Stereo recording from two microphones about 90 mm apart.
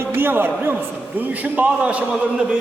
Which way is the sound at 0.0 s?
25° right (ahead or behind).